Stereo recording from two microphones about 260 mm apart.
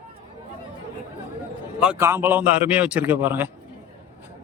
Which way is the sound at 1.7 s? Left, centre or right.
Centre.